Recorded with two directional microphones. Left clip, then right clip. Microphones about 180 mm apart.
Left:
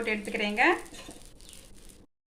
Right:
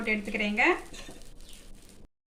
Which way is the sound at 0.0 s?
20° left (ahead or behind).